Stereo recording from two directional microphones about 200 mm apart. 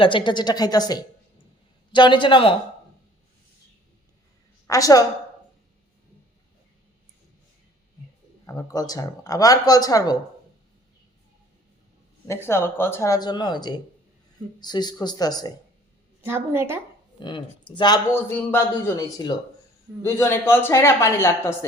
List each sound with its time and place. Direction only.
0.0 s speech: 25° left (ahead or behind)
4.6 s a woman's voice: 15° left (ahead or behind)
8.4 s speech: 15° left (ahead or behind)
12.3 s speech: 10° left (ahead or behind)
16.2 s a woman's voice: 10° right (ahead or behind)
17.2 s speech: 25° left (ahead or behind)